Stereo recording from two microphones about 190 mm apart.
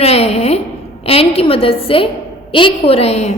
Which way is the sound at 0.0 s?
35° left (ahead or behind).